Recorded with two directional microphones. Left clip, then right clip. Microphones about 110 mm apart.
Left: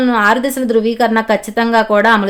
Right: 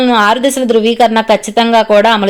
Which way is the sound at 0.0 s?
20° right (ahead or behind).